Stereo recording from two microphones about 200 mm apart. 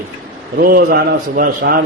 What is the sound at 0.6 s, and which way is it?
Speech, 45° right (ahead or behind).